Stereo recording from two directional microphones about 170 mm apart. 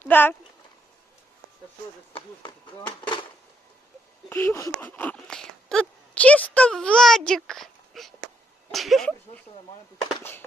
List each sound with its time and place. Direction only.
0.0 s speech: 10° left (ahead or behind)
2.1 s speech: 25° left (ahead or behind)
4.3 s a sound: 15° left (ahead or behind)
8.7 s speech: centre (ahead or behind)